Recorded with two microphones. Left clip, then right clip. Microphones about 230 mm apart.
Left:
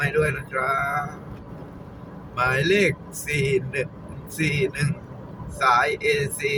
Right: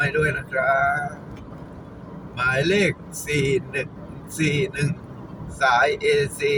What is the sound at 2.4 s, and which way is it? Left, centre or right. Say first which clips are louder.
Speech: even; centre.